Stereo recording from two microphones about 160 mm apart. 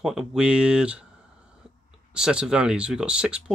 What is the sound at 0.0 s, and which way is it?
Speech, 5° right (ahead or behind).